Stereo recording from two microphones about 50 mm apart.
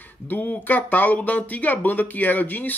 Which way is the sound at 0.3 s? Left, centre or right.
Left.